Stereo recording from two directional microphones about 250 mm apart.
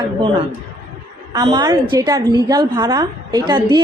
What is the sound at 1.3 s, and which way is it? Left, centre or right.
A woman's voice, centre.